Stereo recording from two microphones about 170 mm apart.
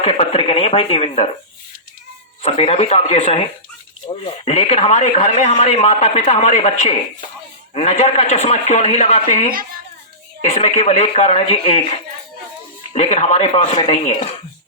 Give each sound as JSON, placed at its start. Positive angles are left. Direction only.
{"t": 0.0, "sound": "a man's voice", "side_deg": 35}
{"t": 2.4, "sound": "a man's voice", "side_deg": 40}
{"t": 10.5, "sound": "a man's voice", "side_deg": 40}